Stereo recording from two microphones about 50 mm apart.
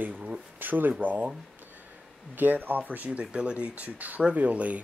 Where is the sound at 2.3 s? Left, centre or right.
Right.